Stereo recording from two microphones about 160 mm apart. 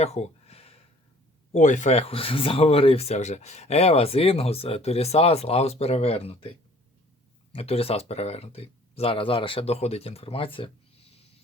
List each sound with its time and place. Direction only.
0.0 s a sound: 40° left (ahead or behind)
1.5 s speech: 50° left (ahead or behind)
7.5 s speech: 40° left (ahead or behind)